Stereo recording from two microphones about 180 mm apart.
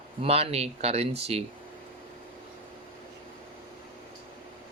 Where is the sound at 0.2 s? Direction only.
35° right (ahead or behind).